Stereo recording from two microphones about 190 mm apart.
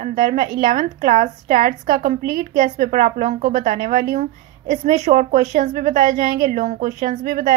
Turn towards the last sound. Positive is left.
turn(degrees=-45)  # may be behind; listen again after turning